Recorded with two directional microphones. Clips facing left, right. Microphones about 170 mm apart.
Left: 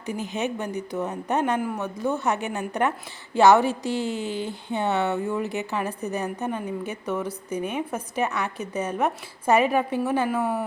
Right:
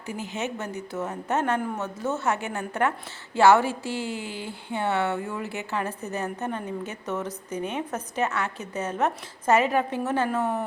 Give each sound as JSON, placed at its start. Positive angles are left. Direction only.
{"t": 0.0, "sound": "a woman's voice", "side_deg": 20}